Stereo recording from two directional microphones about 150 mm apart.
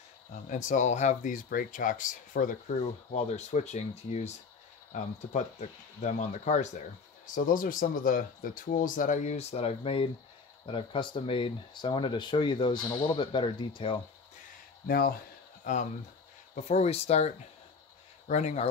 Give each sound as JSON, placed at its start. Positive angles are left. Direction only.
{"t": 0.5, "sound": "speech", "side_deg": 60}
{"t": 3.1, "sound": "speech", "side_deg": 50}
{"t": 7.3, "sound": "speech", "side_deg": 65}
{"t": 14.9, "sound": "speech", "side_deg": 90}
{"t": 15.6, "sound": "speech", "side_deg": 55}